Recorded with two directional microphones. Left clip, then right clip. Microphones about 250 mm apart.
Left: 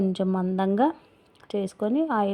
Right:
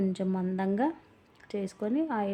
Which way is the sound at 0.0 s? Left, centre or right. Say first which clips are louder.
Left 6 dB; centre.